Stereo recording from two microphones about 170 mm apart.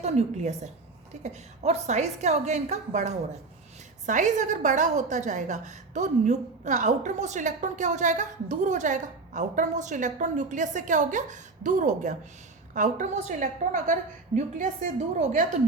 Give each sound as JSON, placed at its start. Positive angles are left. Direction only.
{"t": 0.0, "sound": "a woman's voice", "side_deg": -40}